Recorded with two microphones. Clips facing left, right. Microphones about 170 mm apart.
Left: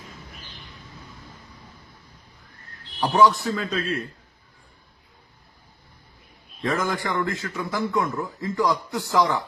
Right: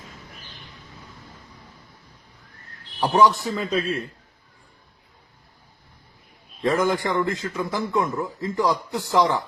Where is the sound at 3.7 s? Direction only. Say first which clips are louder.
Right 2 dB; 25° right (ahead or behind).